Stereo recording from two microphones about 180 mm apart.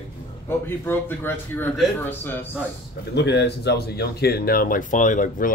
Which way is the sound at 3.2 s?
70° left (ahead or behind).